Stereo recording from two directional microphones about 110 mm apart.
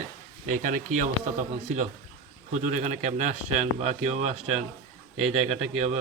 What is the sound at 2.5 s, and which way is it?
A man's voice, 90° right.